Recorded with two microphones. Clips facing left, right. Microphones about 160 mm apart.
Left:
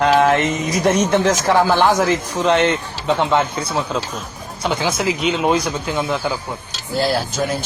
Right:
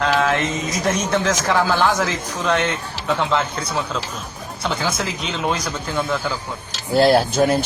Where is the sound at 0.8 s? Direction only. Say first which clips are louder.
Left 5 dB; 15° left (ahead or behind).